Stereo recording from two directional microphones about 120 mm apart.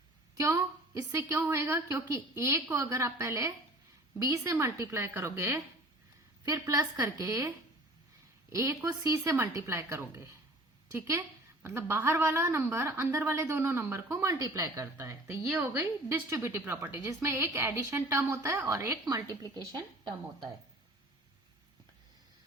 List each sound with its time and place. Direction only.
0.3 s a woman's voice: 25° right (ahead or behind)